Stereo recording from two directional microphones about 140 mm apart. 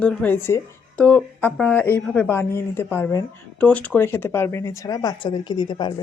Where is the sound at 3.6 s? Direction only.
10° left (ahead or behind); by 5.9 s 30° left (ahead or behind).